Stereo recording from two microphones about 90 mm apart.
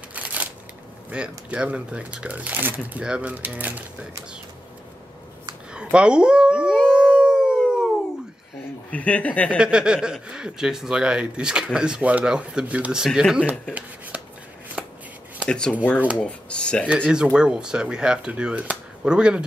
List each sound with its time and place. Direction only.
0.1 s a sound: 15° right (ahead or behind)
1.1 s speech: 10° right (ahead or behind)
5.7 s speech: 10° right (ahead or behind)
7.2 s howl: 10° right (ahead or behind)
8.9 s speech: 15° left (ahead or behind)
9.6 s speech: 10° right (ahead or behind)
13.5 s rub: 15° right (ahead or behind)
14.8 s shuffling cards: 10° right (ahead or behind)
15.4 s speech: 10° left (ahead or behind)
16.8 s speech: 10° right (ahead or behind)